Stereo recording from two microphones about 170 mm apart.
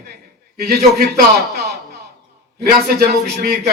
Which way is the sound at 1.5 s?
65° right (ahead or behind).